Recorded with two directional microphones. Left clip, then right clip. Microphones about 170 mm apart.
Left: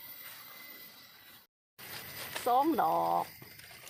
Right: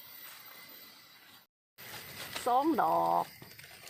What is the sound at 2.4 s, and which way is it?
Speech, 25° right (ahead or behind).